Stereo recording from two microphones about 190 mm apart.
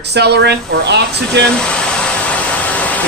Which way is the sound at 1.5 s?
5° left (ahead or behind).